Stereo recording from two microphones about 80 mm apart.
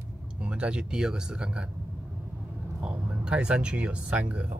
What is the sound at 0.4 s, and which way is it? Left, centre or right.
Speech, centre.